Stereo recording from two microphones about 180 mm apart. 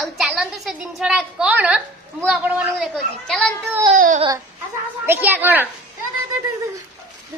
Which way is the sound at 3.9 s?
45° right (ahead or behind).